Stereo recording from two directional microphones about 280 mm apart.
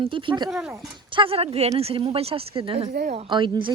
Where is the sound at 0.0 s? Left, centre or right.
Centre.